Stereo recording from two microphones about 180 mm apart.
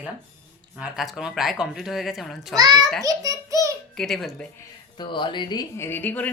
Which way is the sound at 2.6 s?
20° right (ahead or behind).